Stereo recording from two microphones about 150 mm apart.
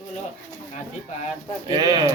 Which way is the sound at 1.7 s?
30° right (ahead or behind).